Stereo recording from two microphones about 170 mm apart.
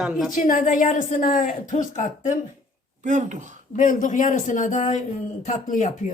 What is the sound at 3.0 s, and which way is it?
Speech, 45° right (ahead or behind).